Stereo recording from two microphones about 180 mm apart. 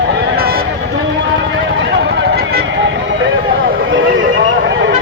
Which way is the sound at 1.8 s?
80° right.